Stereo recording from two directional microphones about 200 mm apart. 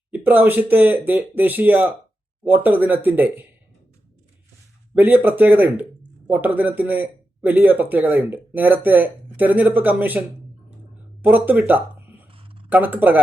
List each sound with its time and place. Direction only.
0.1 s speech: 10° right (ahead or behind)
4.9 s speech: 10° right (ahead or behind)
12.3 s a sound: 25° right (ahead or behind)
12.6 s speech: 10° right (ahead or behind)